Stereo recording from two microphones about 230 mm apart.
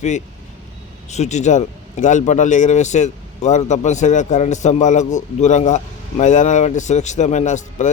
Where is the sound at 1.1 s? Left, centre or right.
Left.